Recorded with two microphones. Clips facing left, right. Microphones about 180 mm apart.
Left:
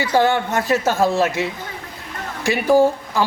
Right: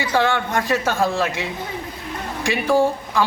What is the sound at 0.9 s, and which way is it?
Speech, 15° left (ahead or behind).